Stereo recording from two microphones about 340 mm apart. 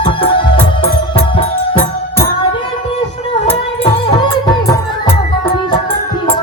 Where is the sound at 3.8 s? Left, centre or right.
Centre.